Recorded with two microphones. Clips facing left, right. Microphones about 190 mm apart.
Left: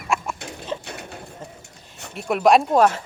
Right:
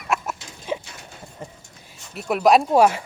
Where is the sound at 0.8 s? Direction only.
60° left (ahead or behind).